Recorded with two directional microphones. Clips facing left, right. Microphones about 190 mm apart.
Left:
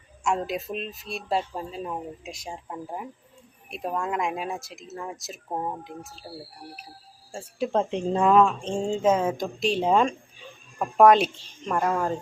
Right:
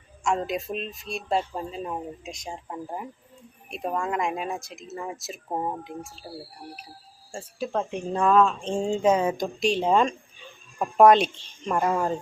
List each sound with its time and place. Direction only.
0.3 s speech: 5° left (ahead or behind)
7.6 s speech: 25° left (ahead or behind)
8.7 s speech: centre (ahead or behind)